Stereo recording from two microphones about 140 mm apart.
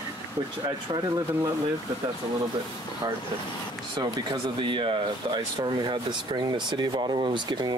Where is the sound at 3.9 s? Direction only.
35° right (ahead or behind).